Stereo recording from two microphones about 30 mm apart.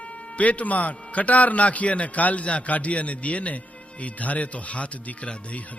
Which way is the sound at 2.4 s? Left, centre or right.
Left.